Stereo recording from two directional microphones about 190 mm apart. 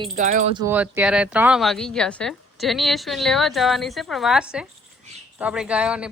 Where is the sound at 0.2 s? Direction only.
40° right (ahead or behind).